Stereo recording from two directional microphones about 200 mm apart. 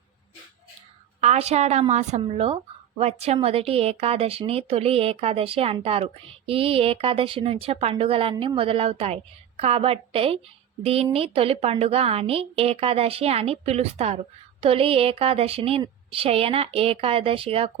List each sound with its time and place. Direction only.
1.2 s a woman's voice: 35° right (ahead or behind)